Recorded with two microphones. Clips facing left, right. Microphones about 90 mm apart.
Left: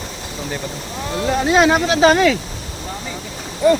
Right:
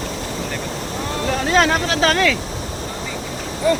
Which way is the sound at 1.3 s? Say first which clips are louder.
Left 3 dB; 15° left (ahead or behind).